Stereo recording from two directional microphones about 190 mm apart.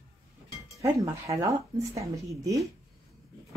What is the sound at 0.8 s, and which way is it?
Speech, 15° right (ahead or behind).